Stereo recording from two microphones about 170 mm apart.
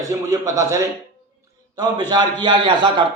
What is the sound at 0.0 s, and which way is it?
A man's voice, 20° right (ahead or behind).